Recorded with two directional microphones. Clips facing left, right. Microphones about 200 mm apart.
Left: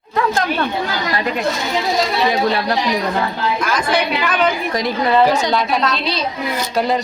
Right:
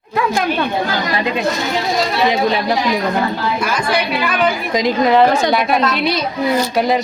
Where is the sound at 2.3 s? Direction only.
20° right (ahead or behind).